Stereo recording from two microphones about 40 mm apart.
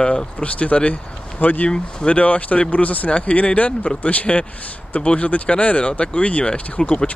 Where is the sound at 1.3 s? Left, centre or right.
Left.